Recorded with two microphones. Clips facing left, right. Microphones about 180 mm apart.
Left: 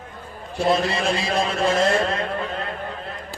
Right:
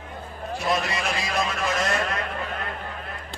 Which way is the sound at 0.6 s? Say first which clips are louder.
Left 6 dB; 30° left (ahead or behind).